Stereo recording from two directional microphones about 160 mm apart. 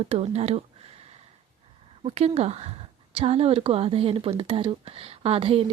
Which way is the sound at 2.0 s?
40° right (ahead or behind).